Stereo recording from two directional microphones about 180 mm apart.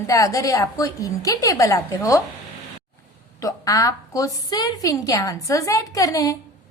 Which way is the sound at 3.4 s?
20° left (ahead or behind).